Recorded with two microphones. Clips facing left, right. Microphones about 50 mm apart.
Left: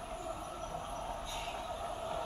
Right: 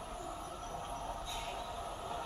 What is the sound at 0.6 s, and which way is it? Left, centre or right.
Train, centre.